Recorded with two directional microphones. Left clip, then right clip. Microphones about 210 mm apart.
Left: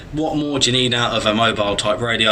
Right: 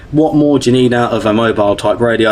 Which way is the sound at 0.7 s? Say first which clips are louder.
Right 6 dB; 45° right (ahead or behind).